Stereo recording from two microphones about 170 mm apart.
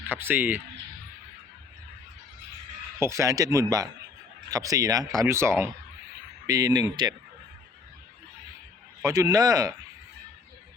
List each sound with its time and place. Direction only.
0.1 s speech: 10° right (ahead or behind)
3.0 s speech: 15° right (ahead or behind)
9.0 s speech: 20° right (ahead or behind)